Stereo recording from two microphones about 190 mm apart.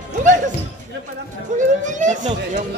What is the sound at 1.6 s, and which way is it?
Children playing, 40° right (ahead or behind).